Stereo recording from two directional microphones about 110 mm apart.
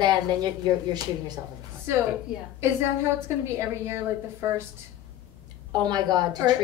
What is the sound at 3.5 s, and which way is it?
A woman's voice, 25° right (ahead or behind).